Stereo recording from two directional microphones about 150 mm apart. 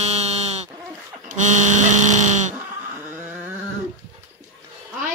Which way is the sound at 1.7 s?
55° right (ahead or behind).